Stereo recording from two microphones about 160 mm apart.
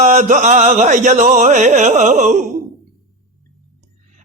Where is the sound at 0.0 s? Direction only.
50° right (ahead or behind).